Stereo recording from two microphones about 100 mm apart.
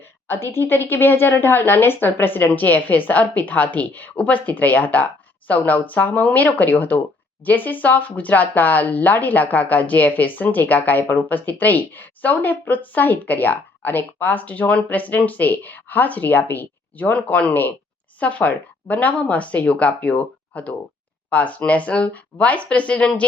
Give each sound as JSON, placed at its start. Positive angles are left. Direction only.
{"t": 0.3, "sound": "a woman's voice", "side_deg": 25}